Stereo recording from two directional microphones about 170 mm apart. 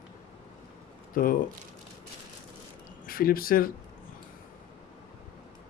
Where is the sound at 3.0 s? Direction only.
60° left (ahead or behind).